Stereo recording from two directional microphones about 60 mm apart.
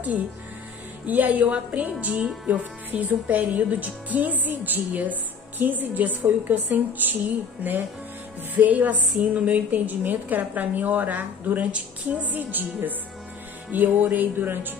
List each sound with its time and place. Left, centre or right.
1.0 s a woman's voice: right
8.5 s a woman's voice: right